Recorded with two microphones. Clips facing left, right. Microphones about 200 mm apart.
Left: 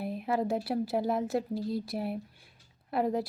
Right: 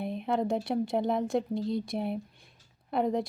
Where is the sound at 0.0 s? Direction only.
5° left (ahead or behind).